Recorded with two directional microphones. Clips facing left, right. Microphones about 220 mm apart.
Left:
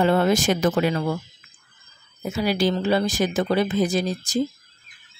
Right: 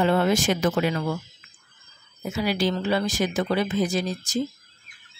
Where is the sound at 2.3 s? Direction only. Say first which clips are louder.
Left 3 dB; 40° left (ahead or behind).